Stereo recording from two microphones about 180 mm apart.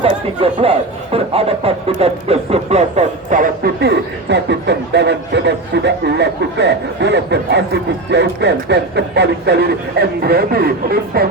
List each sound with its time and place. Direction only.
0.0 s speech: 30° right (ahead or behind); by 11.3 s 60° right (ahead or behind)